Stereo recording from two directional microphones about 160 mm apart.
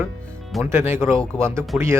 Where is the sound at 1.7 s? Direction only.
5° right (ahead or behind).